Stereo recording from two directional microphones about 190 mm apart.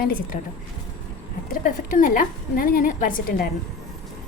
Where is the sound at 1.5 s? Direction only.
45° left (ahead or behind).